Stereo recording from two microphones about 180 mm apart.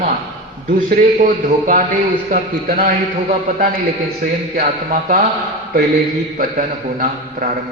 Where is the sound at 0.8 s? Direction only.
45° right (ahead or behind).